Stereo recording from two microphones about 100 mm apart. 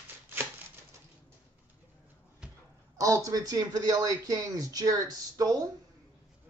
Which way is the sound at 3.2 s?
40° right (ahead or behind).